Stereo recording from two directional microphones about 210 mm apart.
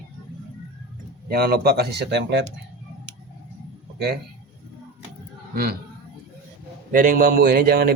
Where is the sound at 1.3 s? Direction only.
45° right (ahead or behind).